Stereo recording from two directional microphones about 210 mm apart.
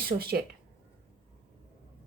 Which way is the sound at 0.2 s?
45° right (ahead or behind).